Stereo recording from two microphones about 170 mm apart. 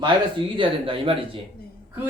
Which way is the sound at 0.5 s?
30° right (ahead or behind).